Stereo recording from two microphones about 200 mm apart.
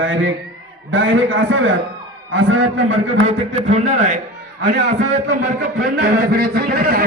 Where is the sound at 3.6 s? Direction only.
35° right (ahead or behind).